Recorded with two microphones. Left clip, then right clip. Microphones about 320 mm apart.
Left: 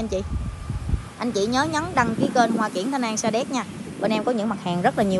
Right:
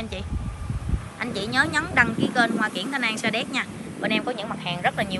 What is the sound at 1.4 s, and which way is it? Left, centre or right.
A woman's voice, centre.